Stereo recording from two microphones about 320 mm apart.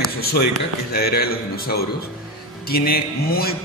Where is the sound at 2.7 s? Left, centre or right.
Left.